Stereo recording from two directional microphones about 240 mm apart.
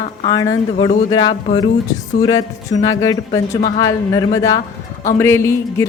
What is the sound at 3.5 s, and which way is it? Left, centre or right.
Speech, left.